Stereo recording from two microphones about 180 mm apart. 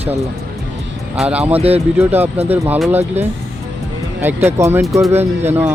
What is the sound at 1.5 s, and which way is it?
Speech, 35° right (ahead or behind).